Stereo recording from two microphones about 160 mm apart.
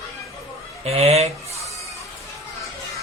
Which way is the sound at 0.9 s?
40° right (ahead or behind).